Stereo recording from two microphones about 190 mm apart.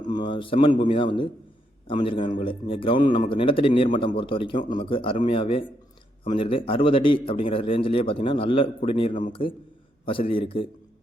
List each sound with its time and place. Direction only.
0.1 s a man's voice: 25° left (ahead or behind)
4.5 s speech: 45° left (ahead or behind)
4.8 s a man's voice: 30° left (ahead or behind)